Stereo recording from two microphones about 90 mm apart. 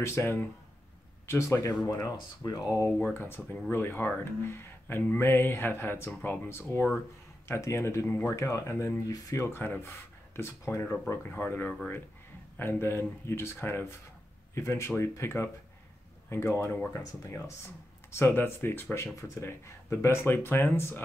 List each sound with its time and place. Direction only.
0.0 s speech: 25° left (ahead or behind)
2.9 s speech: 15° left (ahead or behind)
18.1 s speech: 25° left (ahead or behind)